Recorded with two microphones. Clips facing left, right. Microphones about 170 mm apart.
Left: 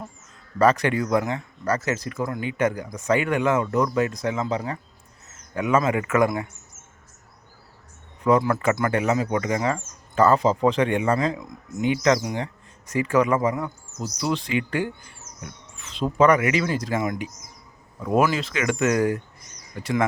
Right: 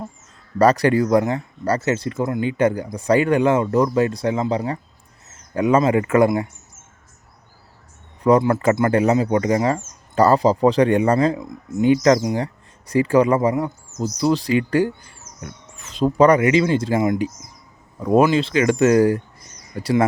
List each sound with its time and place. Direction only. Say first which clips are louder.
0.6 s speech: right 4 dB; 35° right (ahead or behind)
8.2 s speech: right 4 dB; 35° right (ahead or behind)